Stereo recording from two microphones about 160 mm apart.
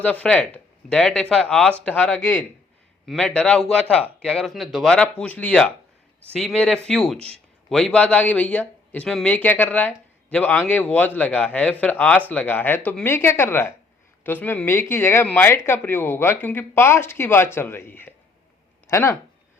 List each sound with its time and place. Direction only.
0.0 s speech: 10° left (ahead or behind)